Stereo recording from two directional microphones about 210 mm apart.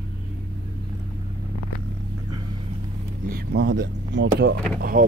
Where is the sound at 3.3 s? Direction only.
55° right (ahead or behind).